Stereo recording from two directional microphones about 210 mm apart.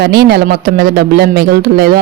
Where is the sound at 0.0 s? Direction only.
50° right (ahead or behind).